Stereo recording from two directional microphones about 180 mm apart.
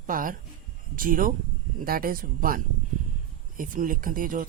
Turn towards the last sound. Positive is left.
turn(degrees=-50)  # may be behind; listen again after turning